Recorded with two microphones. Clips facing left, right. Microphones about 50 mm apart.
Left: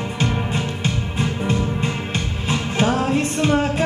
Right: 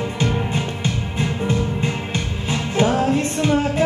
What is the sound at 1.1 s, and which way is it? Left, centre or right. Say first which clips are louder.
Music: right 1 dB; left.